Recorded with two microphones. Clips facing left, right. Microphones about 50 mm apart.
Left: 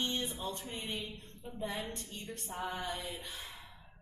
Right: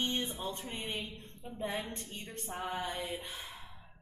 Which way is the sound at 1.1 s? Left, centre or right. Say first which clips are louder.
Right 1 dB; right.